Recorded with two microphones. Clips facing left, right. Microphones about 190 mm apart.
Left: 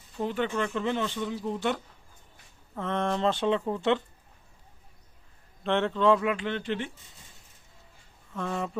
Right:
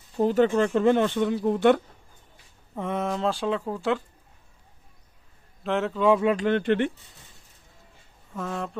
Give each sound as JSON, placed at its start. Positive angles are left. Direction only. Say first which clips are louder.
{"t": 0.2, "sound": "speech", "louder": "right 8 dB", "side_deg": -40}
{"t": 2.7, "sound": "speech", "louder": "right 1 dB", "side_deg": -10}
{"t": 5.6, "sound": "speech", "louder": "right 1 dB", "side_deg": -5}
{"t": 6.3, "sound": "speech", "louder": "right 8 dB", "side_deg": -50}
{"t": 8.4, "sound": "speech", "louder": "even", "side_deg": 0}